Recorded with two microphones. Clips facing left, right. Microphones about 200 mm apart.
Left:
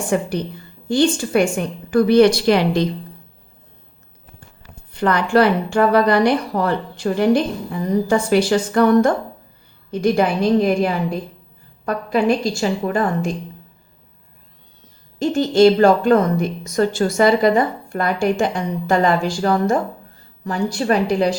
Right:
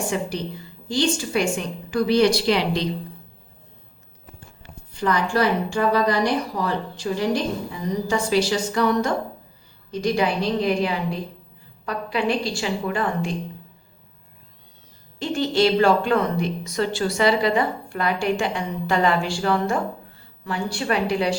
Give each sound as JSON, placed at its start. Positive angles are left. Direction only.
{"t": 0.1, "sound": "speech", "side_deg": 55}
{"t": 4.9, "sound": "a woman's voice", "side_deg": 60}
{"t": 15.2, "sound": "a woman's voice", "side_deg": 45}